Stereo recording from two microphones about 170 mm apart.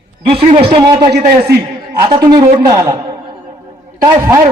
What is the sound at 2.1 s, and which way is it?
A man's voice, 25° right (ahead or behind).